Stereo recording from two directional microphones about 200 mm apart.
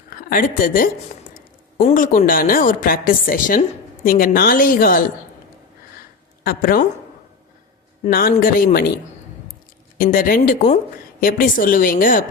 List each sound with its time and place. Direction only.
0.1 s a woman's voice: 45° left (ahead or behind)
6.4 s a woman's voice: 45° left (ahead or behind)
8.0 s a woman's voice: 45° left (ahead or behind)
10.0 s a woman's voice: 45° left (ahead or behind)